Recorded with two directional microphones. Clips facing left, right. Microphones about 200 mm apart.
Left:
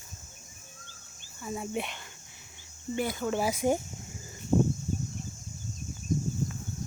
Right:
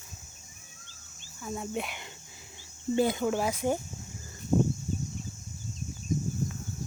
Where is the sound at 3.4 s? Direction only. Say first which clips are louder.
Left 2 dB; 10° left (ahead or behind).